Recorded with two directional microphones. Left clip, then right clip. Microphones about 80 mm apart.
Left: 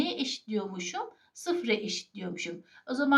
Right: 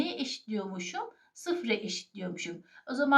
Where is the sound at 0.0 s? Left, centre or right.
Left.